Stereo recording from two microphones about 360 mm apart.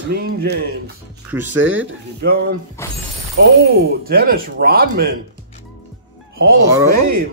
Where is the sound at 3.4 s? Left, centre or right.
Right.